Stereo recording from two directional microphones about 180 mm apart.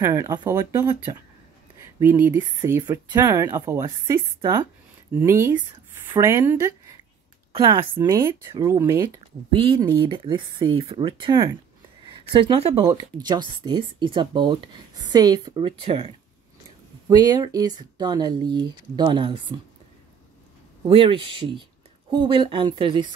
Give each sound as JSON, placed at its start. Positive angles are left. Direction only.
{"t": 0.0, "sound": "speech", "side_deg": -20}
{"t": 2.0, "sound": "speech", "side_deg": -10}
{"t": 7.5, "sound": "speech", "side_deg": -30}
{"t": 9.5, "sound": "speech", "side_deg": -30}
{"t": 17.1, "sound": "speech", "side_deg": -20}
{"t": 20.9, "sound": "speech", "side_deg": -30}